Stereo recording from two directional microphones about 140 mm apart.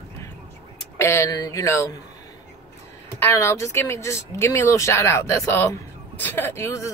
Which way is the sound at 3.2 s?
20° left (ahead or behind).